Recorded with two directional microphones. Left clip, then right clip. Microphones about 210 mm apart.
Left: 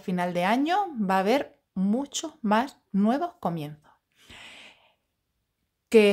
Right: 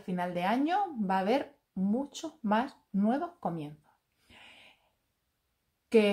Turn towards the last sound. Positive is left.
turn(degrees=45)  # may be behind; listen again after turning